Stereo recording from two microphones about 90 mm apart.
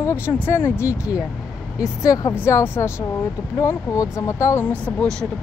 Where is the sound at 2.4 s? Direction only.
25° left (ahead or behind).